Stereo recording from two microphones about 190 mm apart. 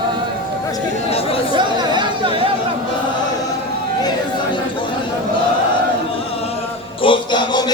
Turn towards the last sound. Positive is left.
turn(degrees=25)  # may be behind; listen again after turning